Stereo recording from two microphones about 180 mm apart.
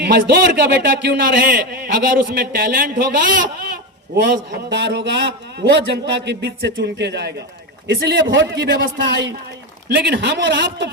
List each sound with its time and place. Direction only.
0.0 s a man's voice: 65° right (ahead or behind)
4.1 s a man's voice: 70° right (ahead or behind)